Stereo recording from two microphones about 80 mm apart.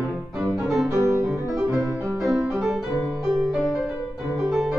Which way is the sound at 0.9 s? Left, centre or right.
Right.